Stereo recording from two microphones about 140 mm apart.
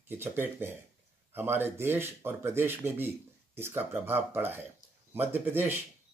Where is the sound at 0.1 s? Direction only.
15° right (ahead or behind).